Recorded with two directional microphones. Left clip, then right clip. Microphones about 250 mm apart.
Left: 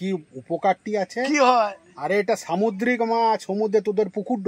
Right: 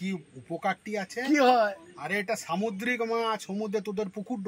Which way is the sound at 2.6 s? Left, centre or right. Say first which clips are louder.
Left 8 dB; left.